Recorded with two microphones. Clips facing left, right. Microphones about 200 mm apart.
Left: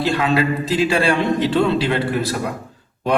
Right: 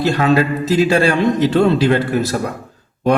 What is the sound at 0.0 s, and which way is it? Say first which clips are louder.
A man's voice: right 3 dB; 45° right (ahead or behind).